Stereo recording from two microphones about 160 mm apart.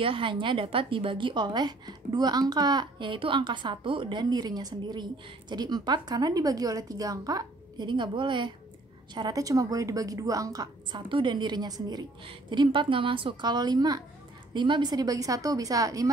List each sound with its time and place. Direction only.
0.0 s a woman's voice: 35° right (ahead or behind)